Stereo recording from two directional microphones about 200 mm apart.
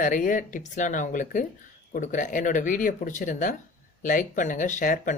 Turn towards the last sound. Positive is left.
turn(degrees=40)  # may be behind; listen again after turning